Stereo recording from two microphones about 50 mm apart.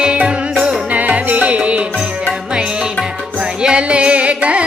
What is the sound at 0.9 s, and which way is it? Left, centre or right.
Music, right.